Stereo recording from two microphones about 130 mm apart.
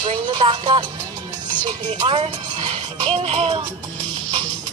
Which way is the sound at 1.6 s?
40° right (ahead or behind).